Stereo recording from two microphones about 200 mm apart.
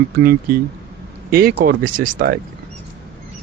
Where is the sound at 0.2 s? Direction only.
45° right (ahead or behind).